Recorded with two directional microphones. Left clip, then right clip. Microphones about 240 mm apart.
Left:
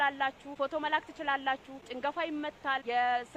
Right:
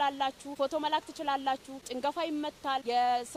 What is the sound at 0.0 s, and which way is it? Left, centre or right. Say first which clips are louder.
Speech: even; right.